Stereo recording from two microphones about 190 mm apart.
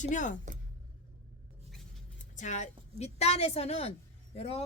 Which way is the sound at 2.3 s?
40° left (ahead or behind).